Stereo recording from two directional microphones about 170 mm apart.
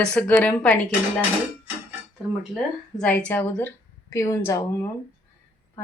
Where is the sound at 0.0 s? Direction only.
5° left (ahead or behind).